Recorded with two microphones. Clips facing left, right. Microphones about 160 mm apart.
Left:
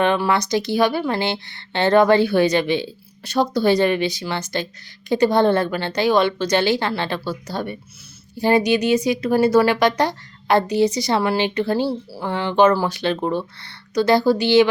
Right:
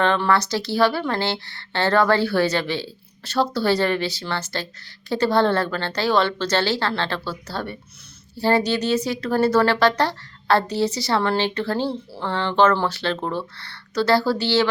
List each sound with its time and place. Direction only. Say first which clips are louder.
0.0 s a woman's voice: left 1 dB; 15° left (ahead or behind)